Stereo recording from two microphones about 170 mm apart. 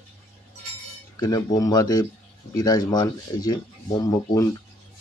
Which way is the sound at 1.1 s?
20° left (ahead or behind).